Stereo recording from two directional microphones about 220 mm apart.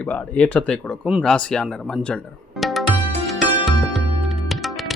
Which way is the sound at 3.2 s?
Centre (ahead or behind).